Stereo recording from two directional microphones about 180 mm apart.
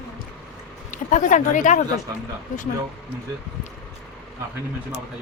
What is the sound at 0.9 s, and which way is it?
Speech, 45° left (ahead or behind).